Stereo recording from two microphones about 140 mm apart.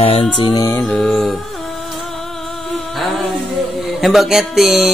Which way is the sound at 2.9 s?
Centre (ahead or behind).